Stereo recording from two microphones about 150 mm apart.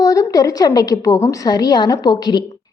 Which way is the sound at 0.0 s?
25° left (ahead or behind).